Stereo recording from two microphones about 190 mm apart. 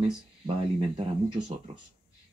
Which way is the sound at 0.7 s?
25° right (ahead or behind).